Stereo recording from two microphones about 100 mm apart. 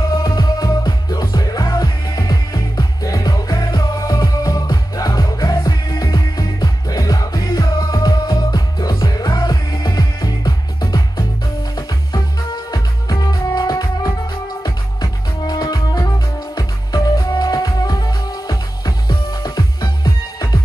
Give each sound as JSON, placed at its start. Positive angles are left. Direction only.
{"t": 0.1, "sound": "music", "side_deg": 40}
{"t": 12.7, "sound": "music", "side_deg": 40}